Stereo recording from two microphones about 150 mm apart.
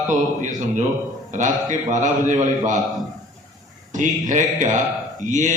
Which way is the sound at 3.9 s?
55° right (ahead or behind).